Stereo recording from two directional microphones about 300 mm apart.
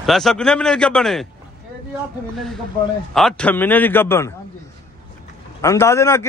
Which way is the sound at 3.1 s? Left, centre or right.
Centre.